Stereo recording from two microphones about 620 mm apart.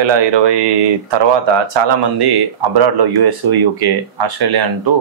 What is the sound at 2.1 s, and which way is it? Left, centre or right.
Speech, right.